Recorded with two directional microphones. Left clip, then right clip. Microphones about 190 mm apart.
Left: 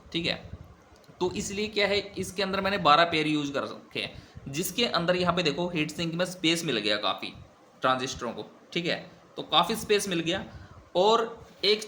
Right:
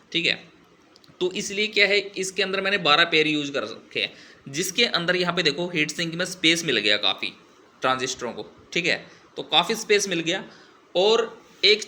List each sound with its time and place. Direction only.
0.1 s a man's voice: 25° left (ahead or behind)
10.9 s a man's voice: 25° left (ahead or behind)